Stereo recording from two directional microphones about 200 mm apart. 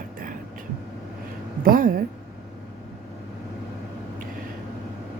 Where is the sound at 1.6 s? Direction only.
45° right (ahead or behind).